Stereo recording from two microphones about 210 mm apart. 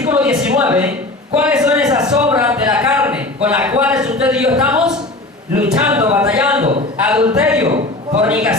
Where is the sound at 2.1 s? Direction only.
5° right (ahead or behind).